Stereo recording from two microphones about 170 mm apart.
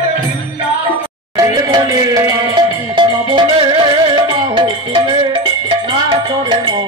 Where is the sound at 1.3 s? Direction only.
20° right (ahead or behind).